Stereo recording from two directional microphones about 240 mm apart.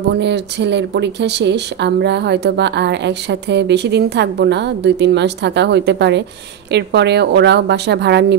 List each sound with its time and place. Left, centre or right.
0.1 s speech: right